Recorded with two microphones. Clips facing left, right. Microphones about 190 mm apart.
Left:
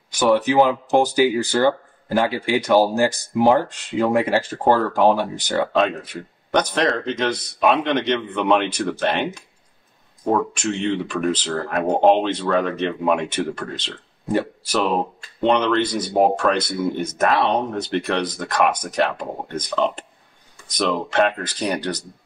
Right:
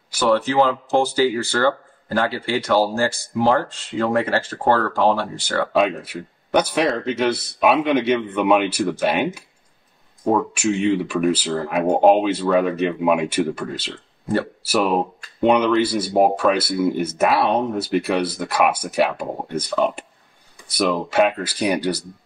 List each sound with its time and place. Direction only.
0.2 s speech: 15° left (ahead or behind)
5.7 s speech: 10° right (ahead or behind)